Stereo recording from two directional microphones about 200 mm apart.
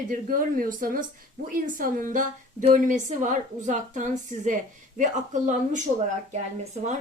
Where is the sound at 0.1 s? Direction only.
45° right (ahead or behind).